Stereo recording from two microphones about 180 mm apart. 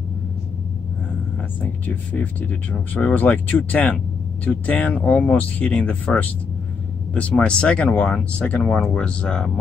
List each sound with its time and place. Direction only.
1.6 s speech: 10° left (ahead or behind)